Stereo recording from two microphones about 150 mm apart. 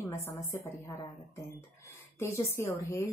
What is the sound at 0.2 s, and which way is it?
Speech, 20° left (ahead or behind).